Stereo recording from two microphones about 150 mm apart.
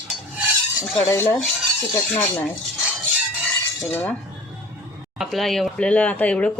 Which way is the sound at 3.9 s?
15° left (ahead or behind).